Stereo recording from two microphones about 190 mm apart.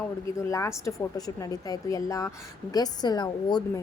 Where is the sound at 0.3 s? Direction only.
15° left (ahead or behind).